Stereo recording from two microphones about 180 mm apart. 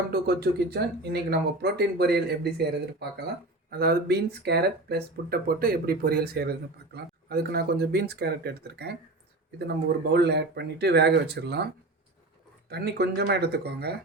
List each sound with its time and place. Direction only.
0.1 s speech: 60° right (ahead or behind)